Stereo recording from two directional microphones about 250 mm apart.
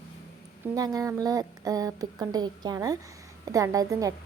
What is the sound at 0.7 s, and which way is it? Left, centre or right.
Speech, centre.